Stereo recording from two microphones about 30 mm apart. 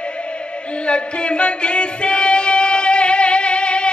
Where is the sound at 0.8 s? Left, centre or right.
Left.